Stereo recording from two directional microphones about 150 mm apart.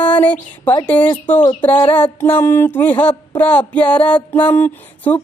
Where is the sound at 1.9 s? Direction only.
10° left (ahead or behind).